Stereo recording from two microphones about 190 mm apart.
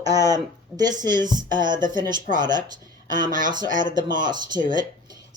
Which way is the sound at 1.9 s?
20° right (ahead or behind).